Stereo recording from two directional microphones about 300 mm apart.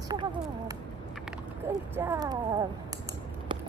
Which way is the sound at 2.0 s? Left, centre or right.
Centre.